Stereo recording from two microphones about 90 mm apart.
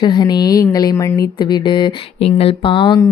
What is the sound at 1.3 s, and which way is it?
Speech, 55° left (ahead or behind).